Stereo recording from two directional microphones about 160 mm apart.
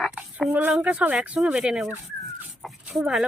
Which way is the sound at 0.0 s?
5° right (ahead or behind).